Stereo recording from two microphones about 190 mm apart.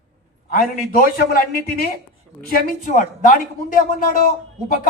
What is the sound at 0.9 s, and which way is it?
Speech, 50° left (ahead or behind).